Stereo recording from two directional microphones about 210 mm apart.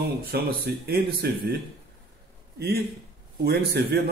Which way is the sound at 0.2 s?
45° right (ahead or behind).